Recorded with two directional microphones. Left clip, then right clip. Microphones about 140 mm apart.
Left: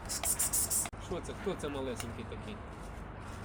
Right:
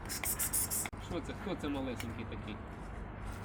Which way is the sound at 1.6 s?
65° left (ahead or behind).